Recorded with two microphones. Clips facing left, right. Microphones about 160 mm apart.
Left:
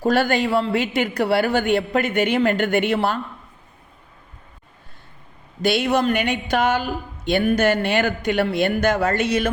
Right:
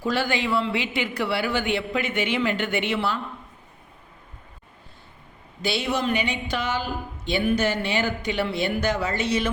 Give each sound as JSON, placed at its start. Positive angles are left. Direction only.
{"t": 0.0, "sound": "speech", "side_deg": 45}
{"t": 5.6, "sound": "speech", "side_deg": 50}